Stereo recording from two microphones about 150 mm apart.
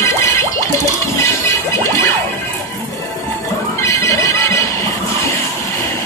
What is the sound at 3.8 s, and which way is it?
Music, 20° left (ahead or behind).